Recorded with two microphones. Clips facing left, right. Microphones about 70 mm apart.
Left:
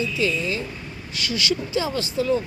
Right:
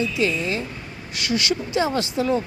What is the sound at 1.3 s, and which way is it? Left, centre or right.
Speech, right.